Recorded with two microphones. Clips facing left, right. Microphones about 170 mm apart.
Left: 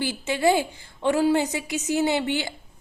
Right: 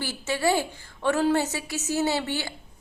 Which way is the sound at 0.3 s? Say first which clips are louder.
Left 3 dB; 15° left (ahead or behind).